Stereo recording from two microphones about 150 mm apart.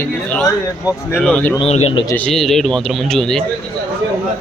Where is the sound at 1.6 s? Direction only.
40° left (ahead or behind).